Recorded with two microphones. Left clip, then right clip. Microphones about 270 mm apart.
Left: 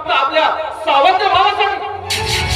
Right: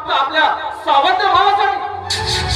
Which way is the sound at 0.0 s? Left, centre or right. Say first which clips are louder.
Left 1 dB; left.